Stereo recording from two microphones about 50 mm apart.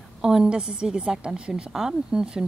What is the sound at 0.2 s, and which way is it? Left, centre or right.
A woman's voice, centre.